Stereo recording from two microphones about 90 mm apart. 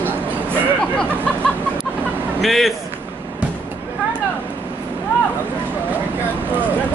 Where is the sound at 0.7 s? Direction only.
10° left (ahead or behind).